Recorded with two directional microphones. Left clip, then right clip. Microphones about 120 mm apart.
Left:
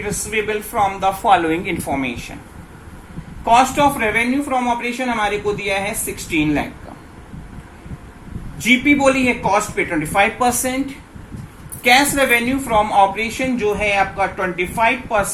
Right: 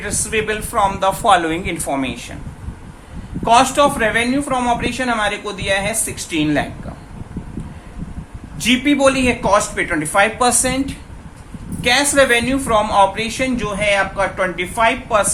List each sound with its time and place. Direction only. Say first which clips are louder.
0.3 s a woman's voice: right 1 dB; 30° right (ahead or behind)
3.4 s a woman's voice: right 1 dB; 35° right (ahead or behind)
8.5 s a woman's voice: left 1 dB; 30° right (ahead or behind)
11.8 s a woman's voice: even; 25° right (ahead or behind)